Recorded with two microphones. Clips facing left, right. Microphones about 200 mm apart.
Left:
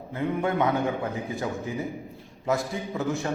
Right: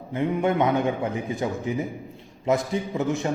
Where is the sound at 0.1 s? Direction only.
20° right (ahead or behind).